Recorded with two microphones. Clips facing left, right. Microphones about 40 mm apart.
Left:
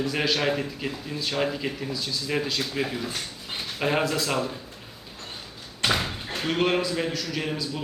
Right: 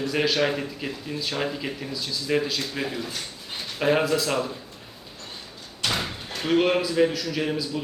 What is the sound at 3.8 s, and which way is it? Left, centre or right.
Speech, centre.